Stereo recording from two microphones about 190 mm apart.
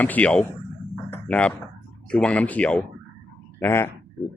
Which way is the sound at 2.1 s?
5° left (ahead or behind).